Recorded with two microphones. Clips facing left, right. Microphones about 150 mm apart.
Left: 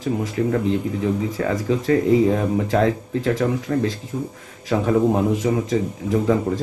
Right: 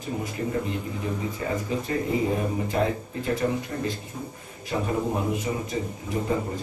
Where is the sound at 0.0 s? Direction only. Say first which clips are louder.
Left 8 dB; 90° left.